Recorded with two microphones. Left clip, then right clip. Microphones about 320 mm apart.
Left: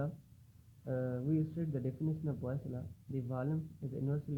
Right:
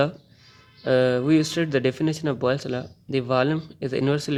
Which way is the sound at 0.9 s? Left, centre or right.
Right.